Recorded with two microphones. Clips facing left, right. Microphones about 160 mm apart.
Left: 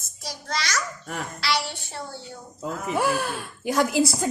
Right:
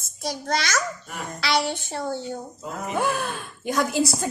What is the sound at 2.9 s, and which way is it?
Speech, centre (ahead or behind).